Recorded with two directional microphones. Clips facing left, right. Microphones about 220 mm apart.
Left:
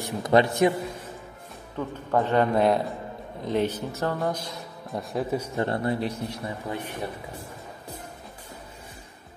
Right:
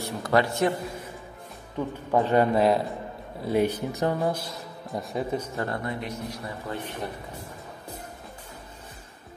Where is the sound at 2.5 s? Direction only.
Centre (ahead or behind).